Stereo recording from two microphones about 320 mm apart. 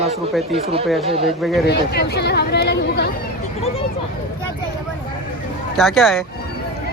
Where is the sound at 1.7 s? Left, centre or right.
Left.